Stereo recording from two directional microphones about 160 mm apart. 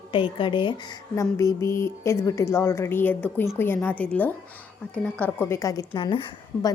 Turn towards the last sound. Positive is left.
turn(degrees=30)  # may be behind; listen again after turning